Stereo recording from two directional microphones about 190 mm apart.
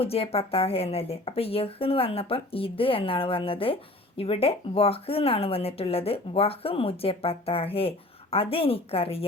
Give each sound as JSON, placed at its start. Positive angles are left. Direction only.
{"t": 0.0, "sound": "a woman's voice", "side_deg": 30}